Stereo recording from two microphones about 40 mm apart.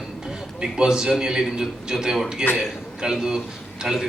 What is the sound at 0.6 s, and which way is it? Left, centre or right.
A man's voice, centre.